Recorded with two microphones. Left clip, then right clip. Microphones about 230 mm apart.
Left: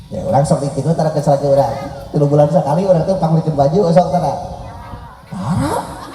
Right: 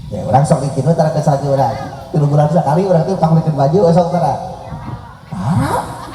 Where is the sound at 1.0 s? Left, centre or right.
Left.